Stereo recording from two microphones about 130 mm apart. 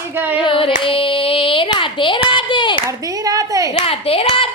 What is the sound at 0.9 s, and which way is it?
Child singing, 45° left (ahead or behind).